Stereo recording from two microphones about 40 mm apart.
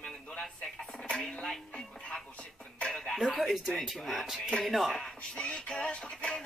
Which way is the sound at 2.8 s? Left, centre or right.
Centre.